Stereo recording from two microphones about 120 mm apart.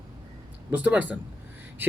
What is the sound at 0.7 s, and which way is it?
Speech, 10° right (ahead or behind).